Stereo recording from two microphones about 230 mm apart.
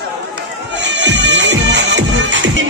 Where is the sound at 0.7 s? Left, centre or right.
Right.